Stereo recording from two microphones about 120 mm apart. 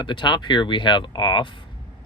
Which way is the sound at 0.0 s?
40° left (ahead or behind).